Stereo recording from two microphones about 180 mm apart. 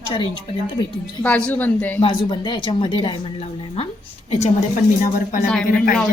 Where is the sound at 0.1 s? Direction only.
30° left (ahead or behind).